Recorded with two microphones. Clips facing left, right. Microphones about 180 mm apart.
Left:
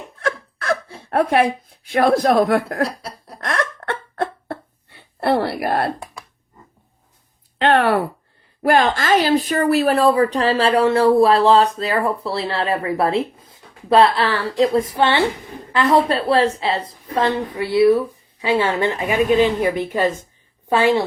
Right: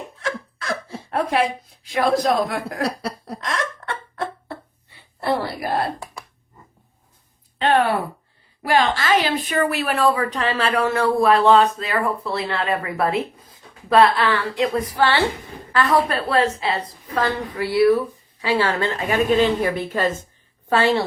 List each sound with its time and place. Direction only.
0.2 s a sound: 55° left (ahead or behind)
7.6 s speech: 70° left (ahead or behind)
8.6 s a woman's voice: 50° left (ahead or behind); by 21.0 s 15° left (ahead or behind)